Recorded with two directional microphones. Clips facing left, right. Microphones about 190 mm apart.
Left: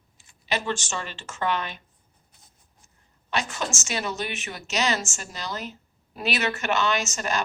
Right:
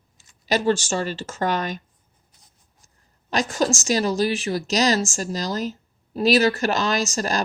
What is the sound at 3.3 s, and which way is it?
A woman's voice, 35° right (ahead or behind).